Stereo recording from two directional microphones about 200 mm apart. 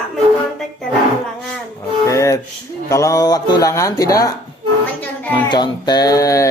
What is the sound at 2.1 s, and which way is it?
Music, 15° left (ahead or behind).